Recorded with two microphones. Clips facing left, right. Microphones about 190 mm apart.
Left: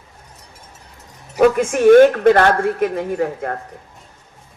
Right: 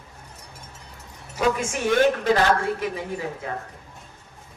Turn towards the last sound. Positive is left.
turn(degrees=60)  # may be behind; listen again after turning